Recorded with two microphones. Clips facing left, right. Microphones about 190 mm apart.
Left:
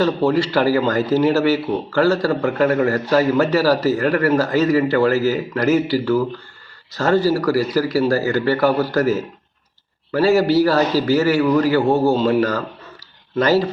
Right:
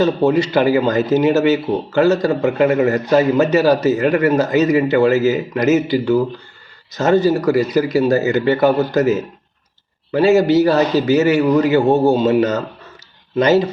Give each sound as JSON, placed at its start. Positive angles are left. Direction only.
{"t": 0.0, "sound": "speech", "side_deg": -20}